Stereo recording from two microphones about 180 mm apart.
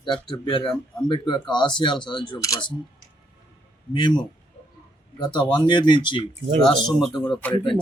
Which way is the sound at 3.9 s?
25° left (ahead or behind).